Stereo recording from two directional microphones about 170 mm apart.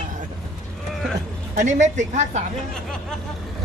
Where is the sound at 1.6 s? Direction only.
45° right (ahead or behind).